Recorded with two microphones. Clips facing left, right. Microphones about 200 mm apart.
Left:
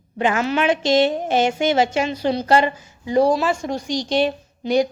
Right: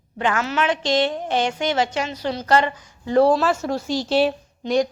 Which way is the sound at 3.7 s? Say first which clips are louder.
Right 1 dB; 5° right (ahead or behind).